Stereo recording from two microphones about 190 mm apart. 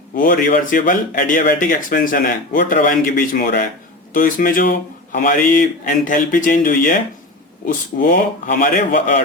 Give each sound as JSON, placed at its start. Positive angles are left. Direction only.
{"t": 0.2, "sound": "speech", "side_deg": 45}